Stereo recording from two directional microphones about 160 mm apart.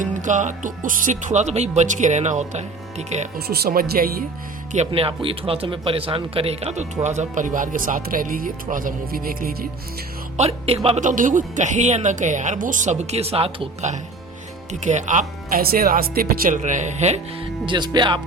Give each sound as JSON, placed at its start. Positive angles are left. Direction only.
{"t": 0.0, "sound": "speech", "side_deg": -50}
{"t": 3.3, "sound": "speech", "side_deg": -75}
{"t": 4.9, "sound": "speech", "side_deg": -35}
{"t": 10.3, "sound": "speech", "side_deg": -40}
{"t": 14.7, "sound": "speech", "side_deg": -50}
{"t": 17.7, "sound": "speech", "side_deg": -25}